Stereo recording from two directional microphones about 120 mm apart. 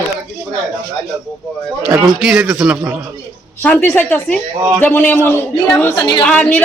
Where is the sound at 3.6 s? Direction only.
15° left (ahead or behind).